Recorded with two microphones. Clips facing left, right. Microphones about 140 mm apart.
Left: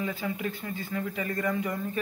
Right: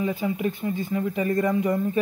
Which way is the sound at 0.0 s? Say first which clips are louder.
Right 6 dB; 20° right (ahead or behind).